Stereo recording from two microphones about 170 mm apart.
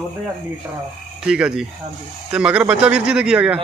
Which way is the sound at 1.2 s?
5° right (ahead or behind).